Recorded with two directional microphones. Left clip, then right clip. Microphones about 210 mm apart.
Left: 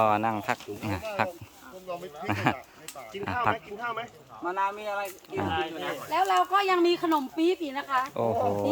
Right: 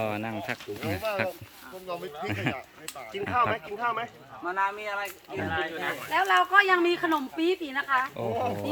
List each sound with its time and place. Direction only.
0.0 s speech: 15° left (ahead or behind)
4.4 s speech: 45° left (ahead or behind)
8.1 s speech: 20° left (ahead or behind)